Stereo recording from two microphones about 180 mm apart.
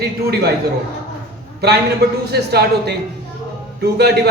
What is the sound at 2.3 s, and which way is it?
Speech, 65° right (ahead or behind).